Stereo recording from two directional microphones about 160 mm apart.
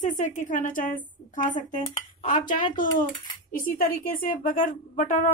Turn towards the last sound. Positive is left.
turn(degrees=50)  # may be behind; listen again after turning